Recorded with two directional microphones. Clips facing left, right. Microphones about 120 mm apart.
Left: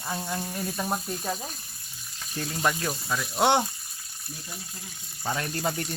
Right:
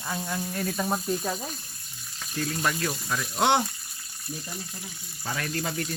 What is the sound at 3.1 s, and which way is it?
Speech, 5° left (ahead or behind).